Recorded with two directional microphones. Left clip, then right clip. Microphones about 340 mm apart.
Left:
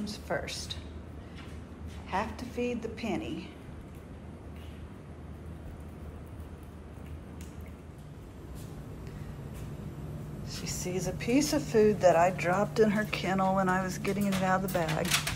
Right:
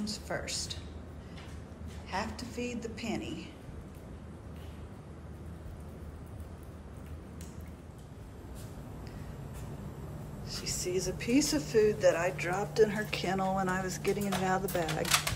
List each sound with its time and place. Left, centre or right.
0.0 s speech: centre
2.0 s a woman's voice: centre
2.5 s speech: right
2.8 s speech: centre
10.8 s a woman's voice: right
11.7 s speech: centre